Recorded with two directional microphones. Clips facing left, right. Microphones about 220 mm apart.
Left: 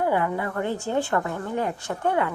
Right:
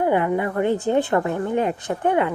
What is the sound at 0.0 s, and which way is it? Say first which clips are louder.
A woman's voice: right 4 dB; 20° right (ahead or behind).